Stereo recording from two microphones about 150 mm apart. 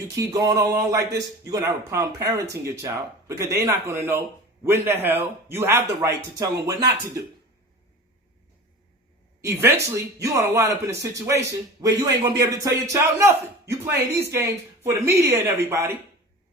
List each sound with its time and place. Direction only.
0.3 s a man's voice: 25° right (ahead or behind)
9.4 s a man's voice: 15° right (ahead or behind)